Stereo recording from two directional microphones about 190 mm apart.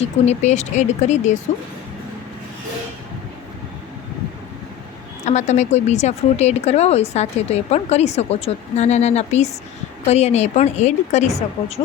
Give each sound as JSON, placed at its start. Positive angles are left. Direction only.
{"t": 0.0, "sound": "a woman's voice", "side_deg": 35}
{"t": 5.2, "sound": "a woman's voice", "side_deg": 40}